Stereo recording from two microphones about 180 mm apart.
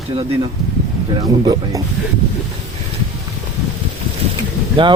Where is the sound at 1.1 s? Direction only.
20° right (ahead or behind).